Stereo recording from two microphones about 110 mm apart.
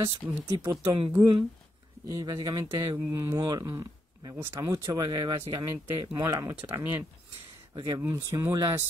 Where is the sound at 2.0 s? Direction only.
35° right (ahead or behind).